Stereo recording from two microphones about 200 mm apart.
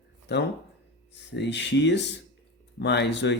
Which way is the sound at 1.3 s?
60° left (ahead or behind).